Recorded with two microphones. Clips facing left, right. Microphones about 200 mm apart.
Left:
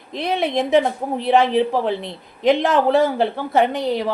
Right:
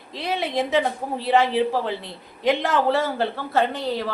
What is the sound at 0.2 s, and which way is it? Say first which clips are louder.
A woman's voice: left 4 dB; 20° left (ahead or behind).